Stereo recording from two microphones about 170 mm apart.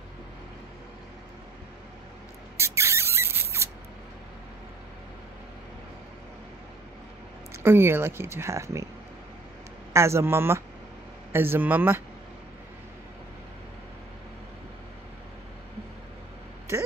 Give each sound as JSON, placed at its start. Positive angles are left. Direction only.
{"t": 2.5, "sound": "spray", "side_deg": -15}
{"t": 7.5, "sound": "speech", "side_deg": -15}
{"t": 9.9, "sound": "speech", "side_deg": -15}